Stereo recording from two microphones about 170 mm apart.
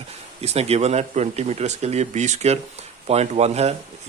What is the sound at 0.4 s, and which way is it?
A man's voice, 40° right (ahead or behind).